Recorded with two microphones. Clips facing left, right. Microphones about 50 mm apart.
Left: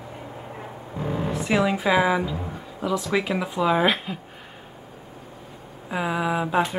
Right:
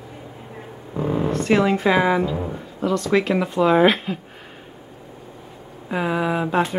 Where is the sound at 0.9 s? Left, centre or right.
Right.